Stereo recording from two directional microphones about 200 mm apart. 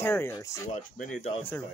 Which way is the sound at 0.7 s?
40° left (ahead or behind).